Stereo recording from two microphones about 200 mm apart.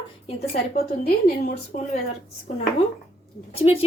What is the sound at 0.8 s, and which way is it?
Speech, 50° left (ahead or behind).